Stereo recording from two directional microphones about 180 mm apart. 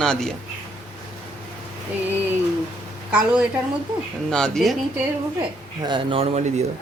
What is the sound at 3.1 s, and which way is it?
A woman's voice, 5° right (ahead or behind).